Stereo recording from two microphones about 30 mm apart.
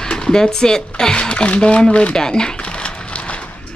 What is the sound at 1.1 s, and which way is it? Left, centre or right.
Speech, left.